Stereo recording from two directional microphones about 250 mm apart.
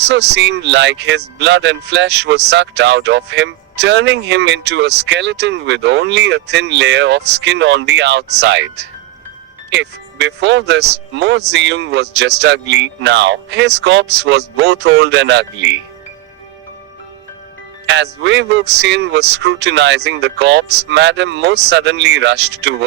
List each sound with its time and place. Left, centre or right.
0.0 s speech: right
17.8 s speech: right